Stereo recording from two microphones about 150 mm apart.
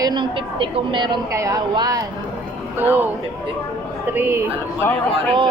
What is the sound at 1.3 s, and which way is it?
Speech, 20° right (ahead or behind).